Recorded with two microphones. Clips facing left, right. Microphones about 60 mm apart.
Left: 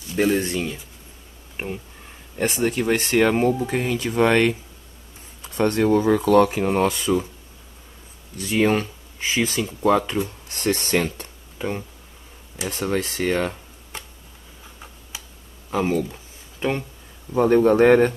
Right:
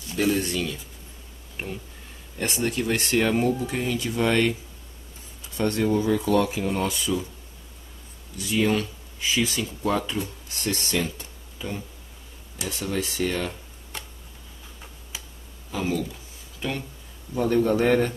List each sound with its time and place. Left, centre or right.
0.1 s speech: left
8.4 s speech: left
10.5 s speech: left
15.7 s a sound: left
17.3 s speech: left